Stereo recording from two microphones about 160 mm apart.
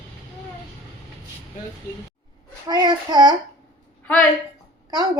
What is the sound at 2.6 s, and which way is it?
Speech, 25° right (ahead or behind).